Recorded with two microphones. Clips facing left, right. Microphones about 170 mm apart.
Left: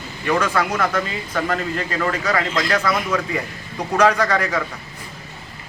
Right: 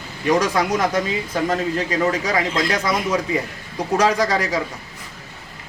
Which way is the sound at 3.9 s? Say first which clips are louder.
Left 1 dB; 35° right (ahead or behind).